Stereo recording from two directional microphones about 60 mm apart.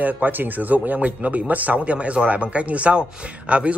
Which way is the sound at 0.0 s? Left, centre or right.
Right.